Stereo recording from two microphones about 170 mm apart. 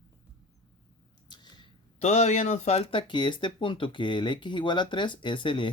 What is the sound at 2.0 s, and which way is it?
Speech, 40° left (ahead or behind).